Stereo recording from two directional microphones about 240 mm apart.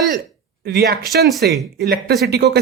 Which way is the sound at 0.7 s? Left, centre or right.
Right.